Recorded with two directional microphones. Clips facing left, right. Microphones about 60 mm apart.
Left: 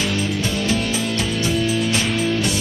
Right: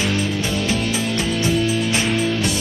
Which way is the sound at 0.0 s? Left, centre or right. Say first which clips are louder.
Right 1 dB; right.